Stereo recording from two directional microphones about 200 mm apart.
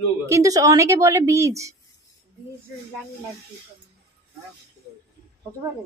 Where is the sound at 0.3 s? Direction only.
15° right (ahead or behind).